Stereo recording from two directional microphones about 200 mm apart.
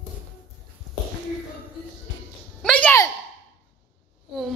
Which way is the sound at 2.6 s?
5° left (ahead or behind).